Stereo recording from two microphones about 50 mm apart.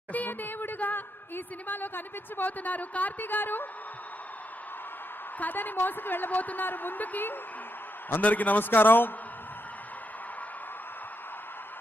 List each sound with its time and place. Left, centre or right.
0.1 s a woman's voice: left
5.4 s a woman's voice: left